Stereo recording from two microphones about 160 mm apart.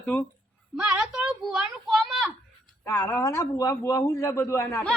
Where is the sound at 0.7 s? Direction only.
5° right (ahead or behind).